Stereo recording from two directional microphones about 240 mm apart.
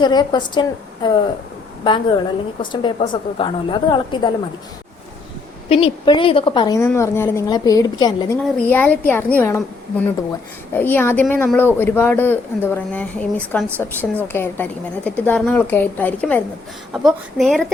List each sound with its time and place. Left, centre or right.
0.0 s a woman's voice: centre
5.6 s speech: left
8.5 s speech: centre
10.8 s a woman's voice: centre